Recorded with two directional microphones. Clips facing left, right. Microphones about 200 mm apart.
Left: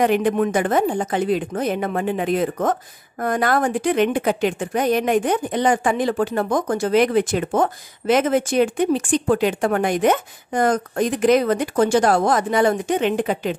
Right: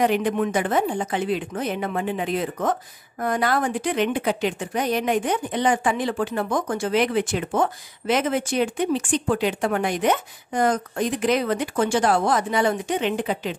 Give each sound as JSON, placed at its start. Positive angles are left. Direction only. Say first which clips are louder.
{"t": 0.0, "sound": "a woman's voice", "louder": "left 3 dB", "side_deg": 50}